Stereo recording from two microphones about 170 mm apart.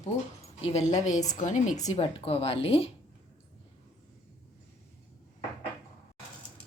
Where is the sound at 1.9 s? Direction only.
35° left (ahead or behind).